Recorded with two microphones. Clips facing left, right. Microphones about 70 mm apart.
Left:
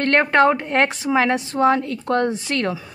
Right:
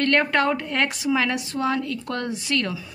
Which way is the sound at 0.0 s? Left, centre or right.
Left.